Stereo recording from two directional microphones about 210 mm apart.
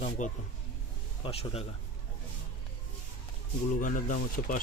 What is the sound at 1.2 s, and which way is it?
Speech, 25° left (ahead or behind).